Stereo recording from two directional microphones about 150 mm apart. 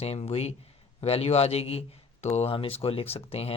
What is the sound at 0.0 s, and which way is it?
Speech, 45° left (ahead or behind).